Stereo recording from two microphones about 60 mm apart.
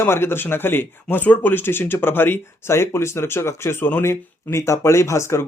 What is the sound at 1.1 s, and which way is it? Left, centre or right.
Speech, left.